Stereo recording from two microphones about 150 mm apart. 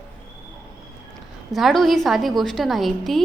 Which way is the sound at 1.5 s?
Centre (ahead or behind).